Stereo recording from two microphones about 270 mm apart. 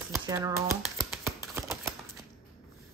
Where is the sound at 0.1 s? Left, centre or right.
Centre.